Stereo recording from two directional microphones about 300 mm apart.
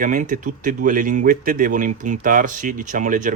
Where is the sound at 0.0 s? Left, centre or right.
Right.